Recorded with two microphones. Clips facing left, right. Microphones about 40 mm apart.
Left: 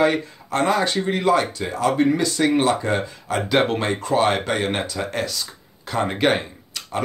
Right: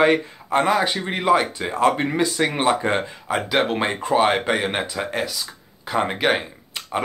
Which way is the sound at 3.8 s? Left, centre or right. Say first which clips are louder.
Right 1 dB; right.